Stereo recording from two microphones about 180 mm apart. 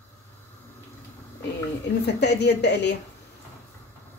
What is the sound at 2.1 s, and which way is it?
Speech, 70° left (ahead or behind).